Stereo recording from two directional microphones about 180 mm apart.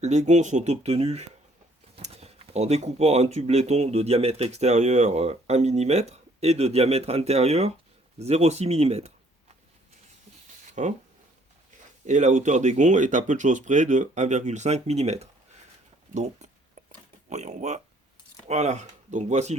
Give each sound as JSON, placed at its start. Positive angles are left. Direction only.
{"t": 0.0, "sound": "speech", "side_deg": -40}
{"t": 10.7, "sound": "a sound", "side_deg": -40}
{"t": 12.0, "sound": "speech", "side_deg": -40}